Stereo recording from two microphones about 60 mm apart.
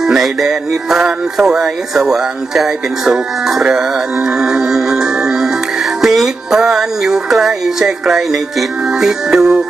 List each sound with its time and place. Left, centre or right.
0.0 s music: centre